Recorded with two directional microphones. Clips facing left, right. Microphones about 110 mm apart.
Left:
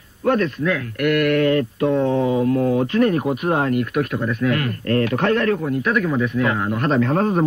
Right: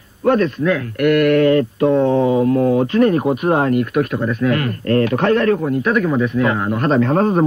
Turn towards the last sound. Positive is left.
turn(degrees=-40)  # may be behind; listen again after turning